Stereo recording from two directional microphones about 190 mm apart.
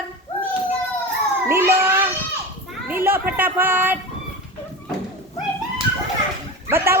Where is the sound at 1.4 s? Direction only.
10° right (ahead or behind).